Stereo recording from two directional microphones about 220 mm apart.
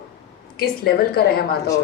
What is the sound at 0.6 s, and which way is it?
A woman's voice, 45° left (ahead or behind).